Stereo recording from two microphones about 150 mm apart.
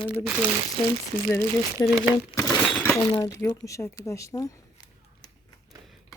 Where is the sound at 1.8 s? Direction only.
15° left (ahead or behind).